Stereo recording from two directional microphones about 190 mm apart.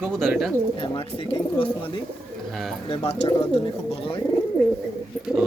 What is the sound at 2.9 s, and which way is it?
Speech, 35° left (ahead or behind).